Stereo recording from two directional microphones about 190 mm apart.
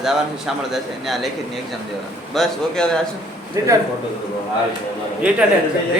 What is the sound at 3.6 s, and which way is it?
Speech, 15° right (ahead or behind).